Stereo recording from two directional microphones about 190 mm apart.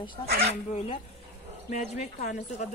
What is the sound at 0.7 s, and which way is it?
A woman's voice, 35° left (ahead or behind).